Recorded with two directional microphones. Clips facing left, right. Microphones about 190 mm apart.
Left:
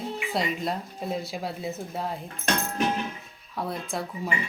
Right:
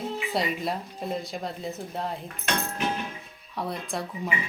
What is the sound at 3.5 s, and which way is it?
Speech, centre (ahead or behind).